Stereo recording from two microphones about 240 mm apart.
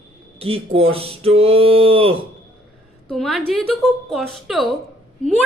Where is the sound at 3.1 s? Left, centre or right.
Centre.